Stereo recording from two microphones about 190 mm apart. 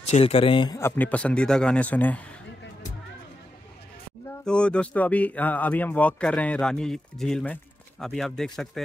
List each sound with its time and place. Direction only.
0.1 s speech: 30° left (ahead or behind)
0.7 s speech: 10° left (ahead or behind)
4.5 s speech: 5° left (ahead or behind)